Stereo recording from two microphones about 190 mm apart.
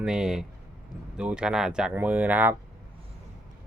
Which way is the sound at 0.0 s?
5° right (ahead or behind).